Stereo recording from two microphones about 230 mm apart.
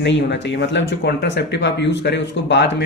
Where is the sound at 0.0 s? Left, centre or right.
Left.